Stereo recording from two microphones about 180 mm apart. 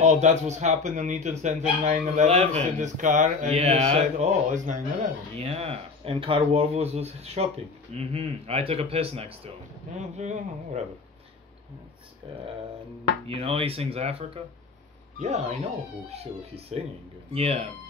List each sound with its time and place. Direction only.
0.0 s a man's voice: 40° right (ahead or behind)
5.3 s a man's voice: 35° right (ahead or behind)
13.3 s a man's voice: 30° right (ahead or behind)